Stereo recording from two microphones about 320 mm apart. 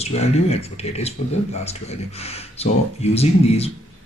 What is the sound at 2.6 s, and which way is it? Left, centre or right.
Speech, centre.